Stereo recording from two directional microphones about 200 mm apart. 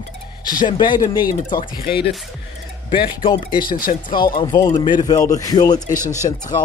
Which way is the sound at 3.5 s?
45° left (ahead or behind).